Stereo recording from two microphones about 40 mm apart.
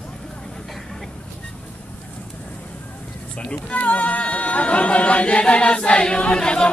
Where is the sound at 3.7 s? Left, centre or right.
Left.